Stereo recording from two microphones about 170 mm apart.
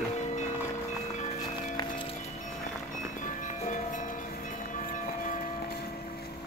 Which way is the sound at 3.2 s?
45° left (ahead or behind).